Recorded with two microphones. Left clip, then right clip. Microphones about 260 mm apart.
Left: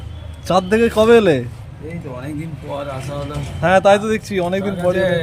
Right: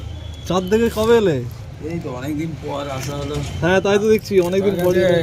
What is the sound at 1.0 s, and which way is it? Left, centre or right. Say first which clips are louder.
Speech: left 6 dB; left.